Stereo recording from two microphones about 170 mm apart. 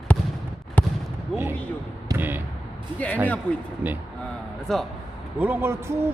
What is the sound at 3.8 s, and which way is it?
Speech, 10° right (ahead or behind).